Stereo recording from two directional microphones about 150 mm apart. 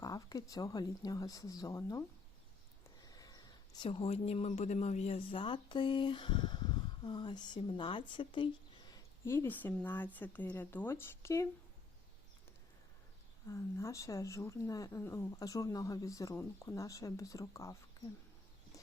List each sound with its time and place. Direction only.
0.0 s speech: 25° left (ahead or behind)
3.0 s a sound: 25° left (ahead or behind)
3.8 s speech: 40° left (ahead or behind)
8.9 s a woman's voice: 20° left (ahead or behind)
13.5 s speech: 20° left (ahead or behind)